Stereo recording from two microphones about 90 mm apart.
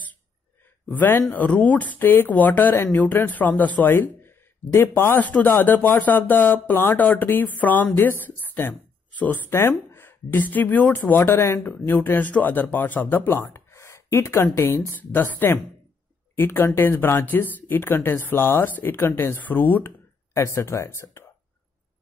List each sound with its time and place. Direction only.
0.8 s speech: 20° left (ahead or behind)
20.3 s speech: 30° left (ahead or behind)